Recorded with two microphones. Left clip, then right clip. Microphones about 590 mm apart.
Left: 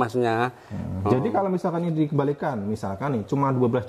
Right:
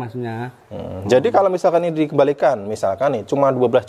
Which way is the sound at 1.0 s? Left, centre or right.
Right.